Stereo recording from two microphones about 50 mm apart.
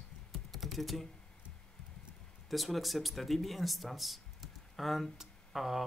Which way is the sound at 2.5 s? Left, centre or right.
Centre.